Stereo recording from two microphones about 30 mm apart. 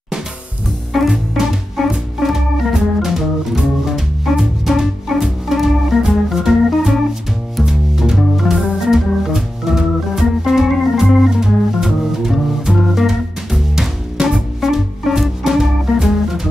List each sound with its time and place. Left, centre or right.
0.9 s music: centre
2.1 s organ: centre
4.2 s music: centre
8.0 s organ: centre
11.3 s music: centre
14.6 s music: centre